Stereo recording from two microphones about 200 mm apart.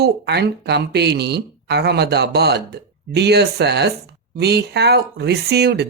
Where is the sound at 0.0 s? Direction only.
55° right (ahead or behind).